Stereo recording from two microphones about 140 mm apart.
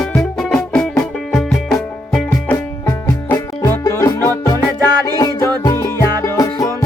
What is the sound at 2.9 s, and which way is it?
Music, 20° left (ahead or behind).